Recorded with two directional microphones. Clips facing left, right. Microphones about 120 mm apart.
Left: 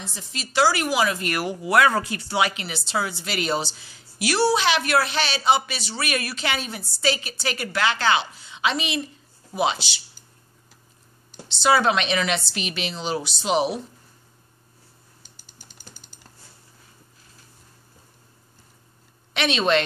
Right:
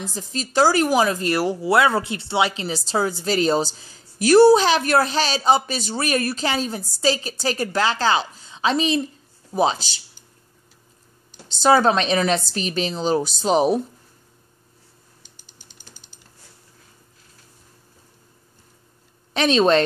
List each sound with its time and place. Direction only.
0.0 s speech: 40° right (ahead or behind)
11.6 s speech: 40° right (ahead or behind)
15.2 s typing: 45° left (ahead or behind)
19.3 s a woman's voice: 35° right (ahead or behind)